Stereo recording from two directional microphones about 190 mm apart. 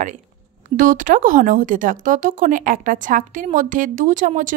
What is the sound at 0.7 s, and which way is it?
A woman's voice, 45° right (ahead or behind).